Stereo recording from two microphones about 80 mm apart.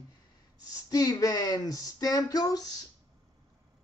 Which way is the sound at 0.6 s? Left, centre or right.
Left.